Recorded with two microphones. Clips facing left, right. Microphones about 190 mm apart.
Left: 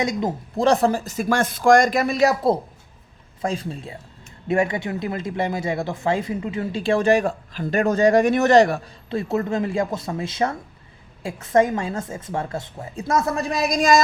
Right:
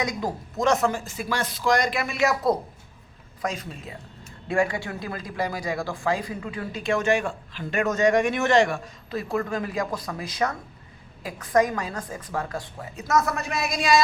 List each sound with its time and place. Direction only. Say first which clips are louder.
0.0 s speech: left 5 dB; 25° left (ahead or behind); by 14.0 s 45° left (ahead or behind)